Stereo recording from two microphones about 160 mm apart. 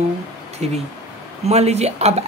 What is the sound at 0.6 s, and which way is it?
Speech, 40° right (ahead or behind).